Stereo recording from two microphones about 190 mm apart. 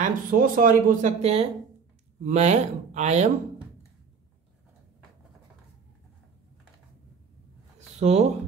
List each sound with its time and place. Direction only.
0.0 s speech: 45° right (ahead or behind)
8.0 s speech: 35° right (ahead or behind)